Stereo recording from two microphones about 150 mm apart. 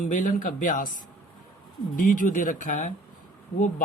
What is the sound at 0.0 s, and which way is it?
Speech, 60° left (ahead or behind).